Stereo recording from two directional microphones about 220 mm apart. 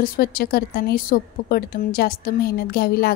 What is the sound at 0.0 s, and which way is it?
A woman's voice, 45° left (ahead or behind).